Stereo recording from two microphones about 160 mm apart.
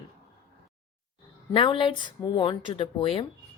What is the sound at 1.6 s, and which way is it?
Speech, 30° left (ahead or behind).